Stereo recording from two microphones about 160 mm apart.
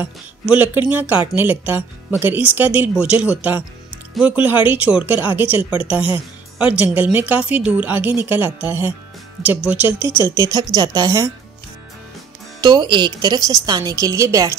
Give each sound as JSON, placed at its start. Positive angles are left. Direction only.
{"t": 0.0, "sound": "a woman's voice", "side_deg": -10}
{"t": 12.5, "sound": "a woman's voice", "side_deg": -25}